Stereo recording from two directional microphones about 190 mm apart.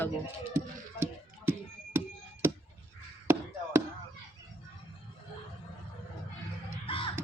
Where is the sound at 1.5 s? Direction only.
10° right (ahead or behind).